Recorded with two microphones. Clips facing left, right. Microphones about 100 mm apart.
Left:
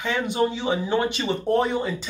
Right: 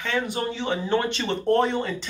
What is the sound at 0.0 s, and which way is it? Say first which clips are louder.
Speech: left 3 dB; 15° left (ahead or behind).